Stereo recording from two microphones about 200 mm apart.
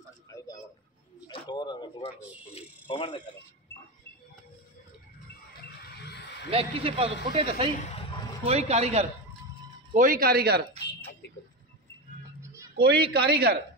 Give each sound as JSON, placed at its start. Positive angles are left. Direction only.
{"t": 1.2, "sound": "a sound", "side_deg": 20}
{"t": 2.9, "sound": "speech", "side_deg": 25}
{"t": 5.9, "sound": "a sound", "side_deg": 55}
{"t": 6.5, "sound": "a man's voice", "side_deg": -30}
{"t": 9.9, "sound": "speech", "side_deg": -45}
{"t": 12.7, "sound": "a woman's voice", "side_deg": -50}